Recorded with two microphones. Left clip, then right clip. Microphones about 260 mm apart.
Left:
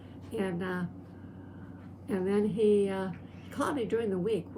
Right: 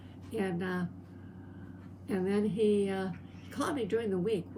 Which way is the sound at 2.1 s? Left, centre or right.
Centre.